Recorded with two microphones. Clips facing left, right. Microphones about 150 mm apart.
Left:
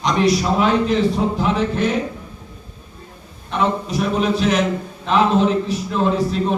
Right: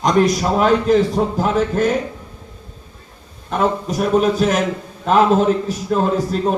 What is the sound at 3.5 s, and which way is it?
A man's voice, 45° right (ahead or behind).